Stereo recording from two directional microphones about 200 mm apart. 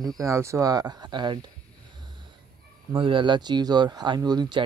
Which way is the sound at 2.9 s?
25° right (ahead or behind).